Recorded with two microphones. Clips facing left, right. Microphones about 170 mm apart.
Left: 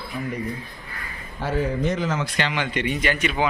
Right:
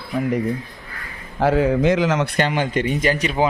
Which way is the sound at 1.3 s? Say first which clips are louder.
Right 7 dB; 90° right.